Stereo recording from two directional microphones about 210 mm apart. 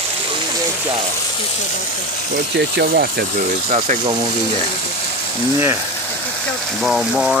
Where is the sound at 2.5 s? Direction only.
50° right (ahead or behind).